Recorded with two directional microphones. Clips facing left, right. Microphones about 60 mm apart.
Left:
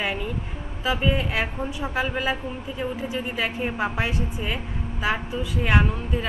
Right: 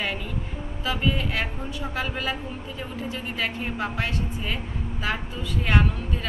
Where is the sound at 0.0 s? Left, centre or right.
Centre.